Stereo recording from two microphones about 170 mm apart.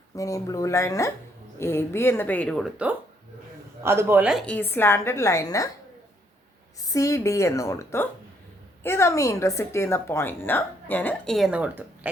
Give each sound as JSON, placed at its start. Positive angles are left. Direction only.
{"t": 0.2, "sound": "a woman's voice", "side_deg": 20}
{"t": 6.8, "sound": "a woman's voice", "side_deg": 20}